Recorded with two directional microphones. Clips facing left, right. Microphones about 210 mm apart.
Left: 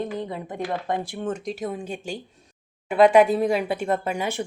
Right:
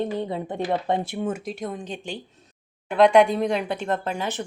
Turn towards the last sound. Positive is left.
turn(degrees=10)  # may be behind; listen again after turning